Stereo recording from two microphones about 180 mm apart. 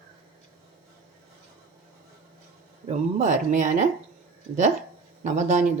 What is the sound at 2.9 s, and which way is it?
Speech, 40° right (ahead or behind).